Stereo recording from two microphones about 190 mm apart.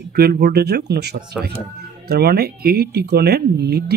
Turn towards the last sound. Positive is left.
turn(degrees=-60)  # may be behind; listen again after turning